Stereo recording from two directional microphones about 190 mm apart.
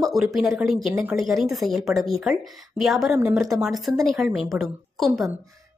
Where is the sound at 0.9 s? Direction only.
15° right (ahead or behind).